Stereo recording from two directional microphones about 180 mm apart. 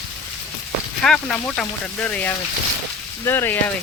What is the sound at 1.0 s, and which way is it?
Speech, 5° left (ahead or behind).